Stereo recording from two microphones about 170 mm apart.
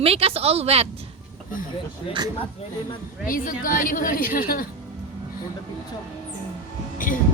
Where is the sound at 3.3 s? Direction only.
55° left (ahead or behind).